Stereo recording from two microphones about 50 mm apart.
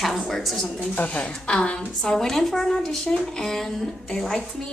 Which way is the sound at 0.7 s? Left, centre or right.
Left.